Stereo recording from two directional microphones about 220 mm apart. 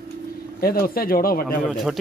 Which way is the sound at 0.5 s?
40° left (ahead or behind).